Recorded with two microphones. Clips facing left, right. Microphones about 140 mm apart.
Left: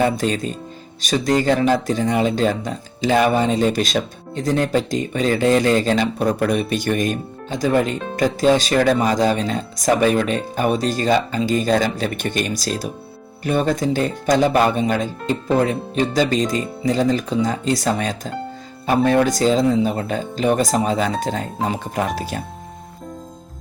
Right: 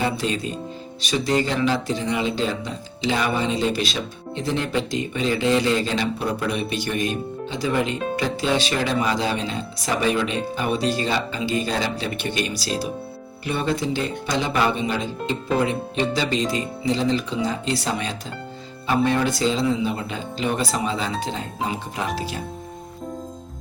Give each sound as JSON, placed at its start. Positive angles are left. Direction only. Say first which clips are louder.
{"t": 0.0, "sound": "speech", "louder": "left 5 dB", "side_deg": 45}